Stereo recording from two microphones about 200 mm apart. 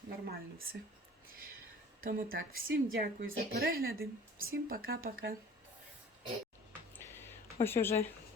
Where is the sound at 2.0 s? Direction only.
45° right (ahead or behind).